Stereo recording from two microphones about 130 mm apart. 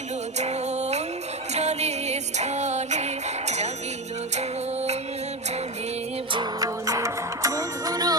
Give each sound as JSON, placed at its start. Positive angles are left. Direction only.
{"t": 0.3, "sound": "music", "side_deg": -60}
{"t": 6.3, "sound": "music", "side_deg": -30}